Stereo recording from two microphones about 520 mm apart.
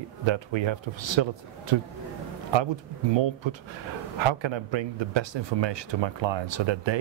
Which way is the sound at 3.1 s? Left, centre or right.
Right.